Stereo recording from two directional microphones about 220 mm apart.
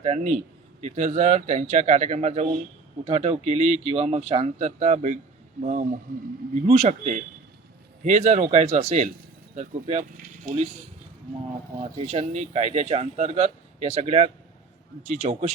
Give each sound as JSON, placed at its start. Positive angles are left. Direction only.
{"t": 0.0, "sound": "a man's voice", "side_deg": -30}
{"t": 11.8, "sound": "a man's voice", "side_deg": -30}